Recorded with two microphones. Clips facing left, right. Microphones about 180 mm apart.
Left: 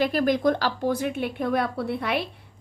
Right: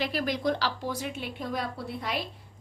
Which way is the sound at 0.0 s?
50° left (ahead or behind).